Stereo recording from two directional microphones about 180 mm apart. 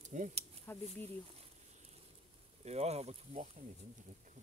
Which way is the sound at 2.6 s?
35° right (ahead or behind).